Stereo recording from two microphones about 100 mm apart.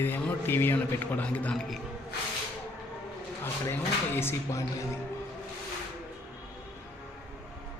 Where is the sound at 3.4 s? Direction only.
25° left (ahead or behind).